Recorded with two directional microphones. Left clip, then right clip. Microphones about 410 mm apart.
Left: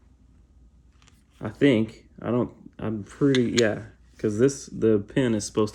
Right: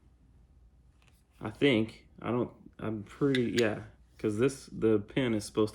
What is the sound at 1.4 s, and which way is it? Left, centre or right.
Speech, centre.